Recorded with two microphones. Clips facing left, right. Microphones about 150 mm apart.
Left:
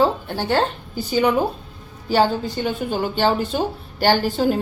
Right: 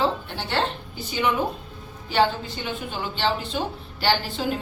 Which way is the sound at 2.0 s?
40° left (ahead or behind).